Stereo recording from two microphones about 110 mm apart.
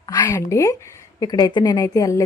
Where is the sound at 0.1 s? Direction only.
30° left (ahead or behind).